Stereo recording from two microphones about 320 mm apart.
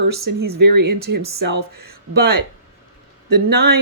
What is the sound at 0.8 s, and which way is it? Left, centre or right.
Speech, right.